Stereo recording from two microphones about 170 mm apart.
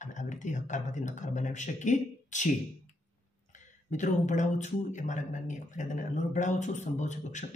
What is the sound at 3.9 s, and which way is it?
Speech, 45° left (ahead or behind).